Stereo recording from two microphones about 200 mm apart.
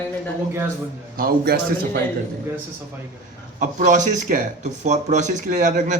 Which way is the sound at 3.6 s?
40° right (ahead or behind).